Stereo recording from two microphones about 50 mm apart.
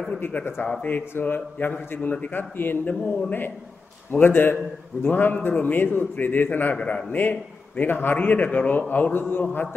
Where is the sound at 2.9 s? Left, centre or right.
Centre.